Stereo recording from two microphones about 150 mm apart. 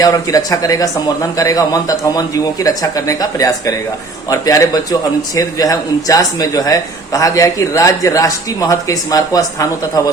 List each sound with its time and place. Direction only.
0.0 s a man's voice: 25° left (ahead or behind)